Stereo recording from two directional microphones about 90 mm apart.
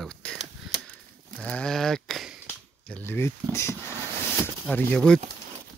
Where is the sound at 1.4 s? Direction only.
10° left (ahead or behind).